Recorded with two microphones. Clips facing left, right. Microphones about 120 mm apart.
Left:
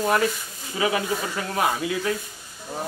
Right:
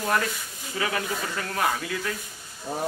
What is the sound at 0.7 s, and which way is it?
Speech, 15° left (ahead or behind).